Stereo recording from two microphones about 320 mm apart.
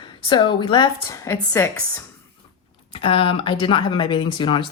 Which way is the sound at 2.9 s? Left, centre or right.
Centre.